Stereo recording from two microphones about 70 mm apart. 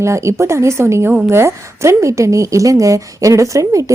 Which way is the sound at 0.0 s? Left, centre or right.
Right.